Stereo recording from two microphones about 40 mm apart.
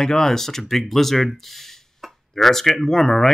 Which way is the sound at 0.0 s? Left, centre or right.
Centre.